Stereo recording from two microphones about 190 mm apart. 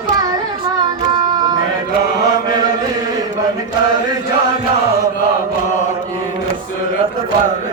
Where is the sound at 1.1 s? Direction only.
25° right (ahead or behind).